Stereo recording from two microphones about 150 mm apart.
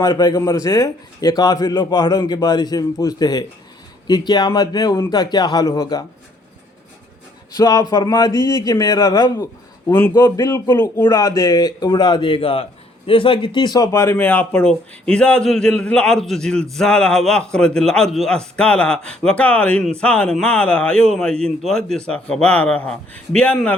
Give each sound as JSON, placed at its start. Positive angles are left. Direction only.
{"t": 0.0, "sound": "a man's voice", "side_deg": 25}
{"t": 7.5, "sound": "a man's voice", "side_deg": 25}